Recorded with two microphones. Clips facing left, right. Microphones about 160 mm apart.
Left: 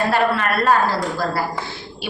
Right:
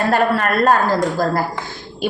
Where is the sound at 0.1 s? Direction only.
45° right (ahead or behind).